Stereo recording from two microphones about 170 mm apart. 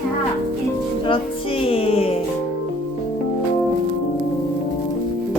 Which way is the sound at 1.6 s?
35° left (ahead or behind).